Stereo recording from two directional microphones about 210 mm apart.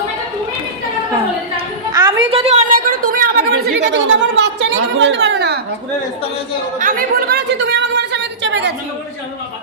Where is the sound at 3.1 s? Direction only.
45° right (ahead or behind).